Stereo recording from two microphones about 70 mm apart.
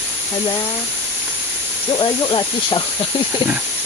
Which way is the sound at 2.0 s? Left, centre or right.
Left.